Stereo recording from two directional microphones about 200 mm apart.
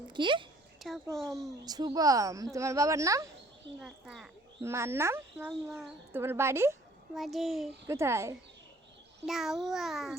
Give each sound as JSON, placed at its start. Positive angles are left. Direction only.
{"t": 0.1, "sound": "a woman's voice", "side_deg": -25}
{"t": 1.1, "sound": "a child's voice", "side_deg": 0}
{"t": 1.6, "sound": "speech", "side_deg": -20}
{"t": 3.8, "sound": "a child's voice", "side_deg": 0}
{"t": 4.6, "sound": "speech", "side_deg": -15}
{"t": 7.1, "sound": "a child's voice", "side_deg": 0}
{"t": 7.9, "sound": "speech", "side_deg": -15}
{"t": 9.2, "sound": "a child's voice", "side_deg": 0}